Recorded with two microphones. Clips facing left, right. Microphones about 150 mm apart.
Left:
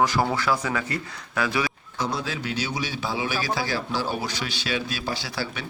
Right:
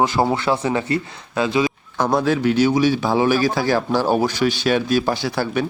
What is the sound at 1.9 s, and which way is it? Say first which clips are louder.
A man's voice: right 11 dB; 55° right (ahead or behind).